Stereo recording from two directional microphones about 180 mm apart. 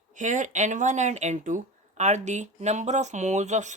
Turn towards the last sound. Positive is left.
turn(degrees=-40)  # may be behind; listen again after turning